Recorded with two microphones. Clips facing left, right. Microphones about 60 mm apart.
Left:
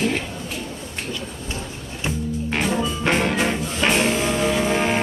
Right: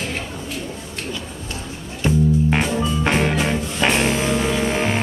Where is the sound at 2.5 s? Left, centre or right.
Centre.